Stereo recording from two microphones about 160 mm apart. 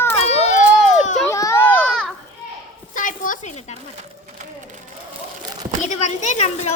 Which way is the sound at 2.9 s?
55° left (ahead or behind).